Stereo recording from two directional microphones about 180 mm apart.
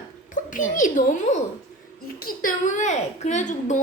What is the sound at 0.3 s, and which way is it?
A child's voice, 45° left (ahead or behind).